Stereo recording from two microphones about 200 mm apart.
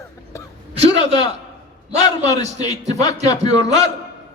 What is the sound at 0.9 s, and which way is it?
A man's voice, 20° left (ahead or behind).